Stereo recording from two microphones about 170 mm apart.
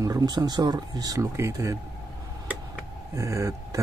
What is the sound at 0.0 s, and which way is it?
Speech, 20° right (ahead or behind).